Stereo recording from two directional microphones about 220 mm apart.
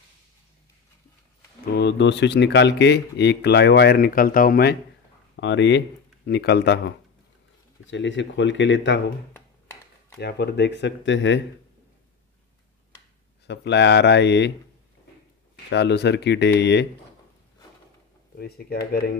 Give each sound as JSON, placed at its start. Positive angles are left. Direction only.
{"t": 1.7, "sound": "speech", "side_deg": 50}
{"t": 5.3, "sound": "speech", "side_deg": 55}
{"t": 7.8, "sound": "speech", "side_deg": 55}
{"t": 9.3, "sound": "a sound", "side_deg": 10}
{"t": 10.1, "sound": "speech", "side_deg": 50}
{"t": 13.5, "sound": "speech", "side_deg": 50}
{"t": 15.5, "sound": "speech", "side_deg": 50}
{"t": 18.4, "sound": "speech", "side_deg": 45}